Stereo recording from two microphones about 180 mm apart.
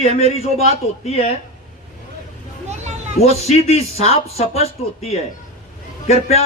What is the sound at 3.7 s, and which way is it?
A man's voice, 35° left (ahead or behind).